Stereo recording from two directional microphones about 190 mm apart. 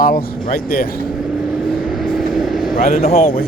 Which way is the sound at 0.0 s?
50° left (ahead or behind).